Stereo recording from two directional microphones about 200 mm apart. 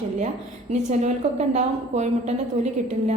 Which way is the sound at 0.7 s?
35° right (ahead or behind).